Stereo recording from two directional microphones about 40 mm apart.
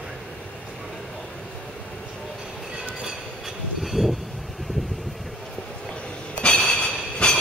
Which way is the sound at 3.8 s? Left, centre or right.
Centre.